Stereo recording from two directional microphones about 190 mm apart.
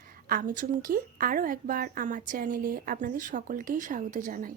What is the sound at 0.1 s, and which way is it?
A woman's voice, 50° right (ahead or behind).